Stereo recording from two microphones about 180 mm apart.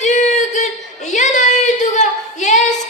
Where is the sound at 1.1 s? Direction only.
40° left (ahead or behind).